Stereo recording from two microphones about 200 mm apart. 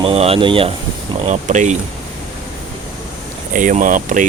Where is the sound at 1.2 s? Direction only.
35° right (ahead or behind).